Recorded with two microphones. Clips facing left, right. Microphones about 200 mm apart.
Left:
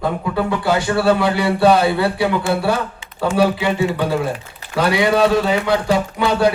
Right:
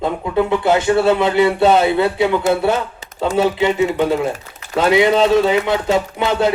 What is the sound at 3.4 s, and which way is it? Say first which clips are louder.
A man's voice: right 2 dB; 20° right (ahead or behind).